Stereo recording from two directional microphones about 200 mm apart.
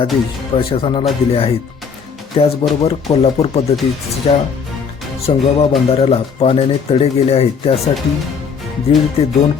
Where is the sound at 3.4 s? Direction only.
30° left (ahead or behind).